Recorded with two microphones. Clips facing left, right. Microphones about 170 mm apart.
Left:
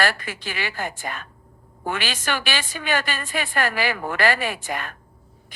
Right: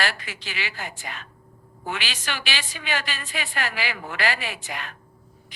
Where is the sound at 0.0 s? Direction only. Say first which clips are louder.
Left 5 dB; 50° left (ahead or behind).